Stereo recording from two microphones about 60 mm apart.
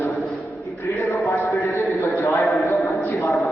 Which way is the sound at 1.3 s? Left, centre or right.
Left.